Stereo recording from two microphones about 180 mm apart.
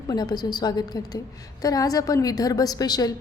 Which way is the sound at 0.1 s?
20° left (ahead or behind).